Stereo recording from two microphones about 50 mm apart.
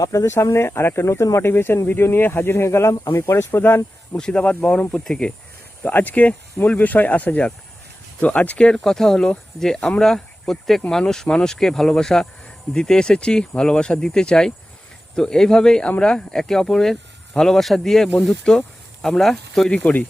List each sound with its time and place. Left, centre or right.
0.3 s speech: left
1.5 s speech: left
2.6 s speech: left
3.3 s speech: left
4.2 s speech: left
5.9 s speech: left
8.8 s speech: centre
19.7 s speech: left